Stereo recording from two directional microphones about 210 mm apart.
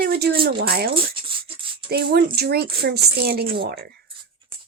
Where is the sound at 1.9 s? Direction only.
50° right (ahead or behind).